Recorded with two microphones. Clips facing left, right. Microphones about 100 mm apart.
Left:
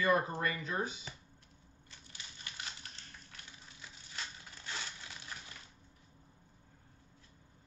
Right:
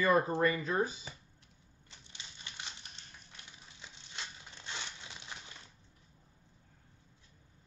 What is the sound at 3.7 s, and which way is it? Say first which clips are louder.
Crushing: even; 20° right (ahead or behind).